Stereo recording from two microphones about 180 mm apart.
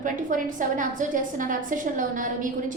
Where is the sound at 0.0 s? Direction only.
45° right (ahead or behind).